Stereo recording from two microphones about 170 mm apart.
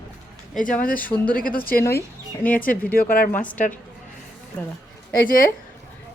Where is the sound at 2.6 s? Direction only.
60° left (ahead or behind).